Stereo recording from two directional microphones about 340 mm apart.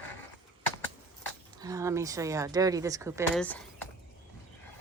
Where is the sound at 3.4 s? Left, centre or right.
Centre.